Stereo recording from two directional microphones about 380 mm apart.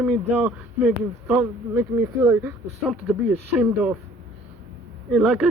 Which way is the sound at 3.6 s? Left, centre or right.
Centre.